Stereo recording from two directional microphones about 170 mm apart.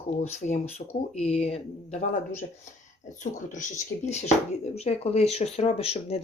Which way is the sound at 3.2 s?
45° left (ahead or behind).